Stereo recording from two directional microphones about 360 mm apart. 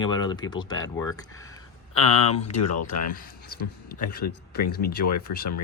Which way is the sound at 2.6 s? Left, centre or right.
Left.